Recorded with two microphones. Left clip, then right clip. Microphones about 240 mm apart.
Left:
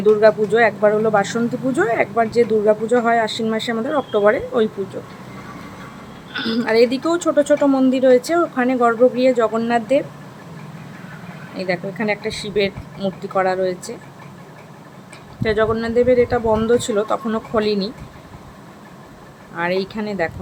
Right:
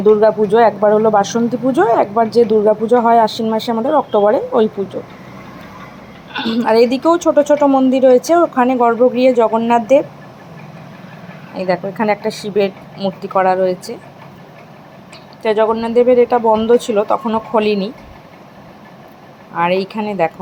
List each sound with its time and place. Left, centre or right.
0.2 s speech: centre
6.3 s speech: centre
11.5 s speech: centre
15.4 s speech: centre
19.5 s speech: centre